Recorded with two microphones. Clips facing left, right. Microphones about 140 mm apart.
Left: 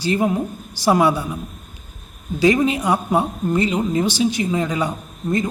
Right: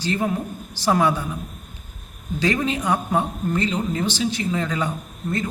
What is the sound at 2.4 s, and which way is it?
A man's voice, 10° left (ahead or behind).